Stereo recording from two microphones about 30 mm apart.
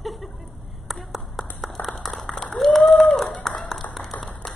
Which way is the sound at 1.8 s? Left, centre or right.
Left.